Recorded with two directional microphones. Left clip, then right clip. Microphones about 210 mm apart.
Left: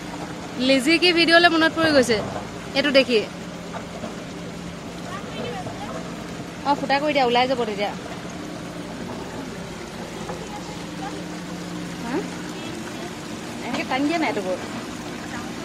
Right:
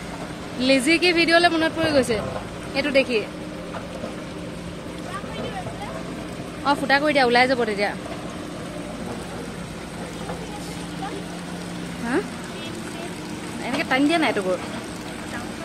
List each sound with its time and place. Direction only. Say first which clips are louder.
0.6 s speech: even; centre (ahead or behind); by 3.3 s 25° left (ahead or behind)
6.6 s speech: right 1 dB; 15° right (ahead or behind)
13.7 s a sound: right 3 dB; 30° right (ahead or behind)